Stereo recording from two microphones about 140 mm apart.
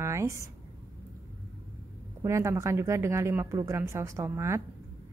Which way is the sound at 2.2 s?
20° right (ahead or behind).